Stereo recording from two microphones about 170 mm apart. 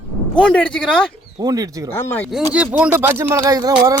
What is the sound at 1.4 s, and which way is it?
Speech, 20° right (ahead or behind).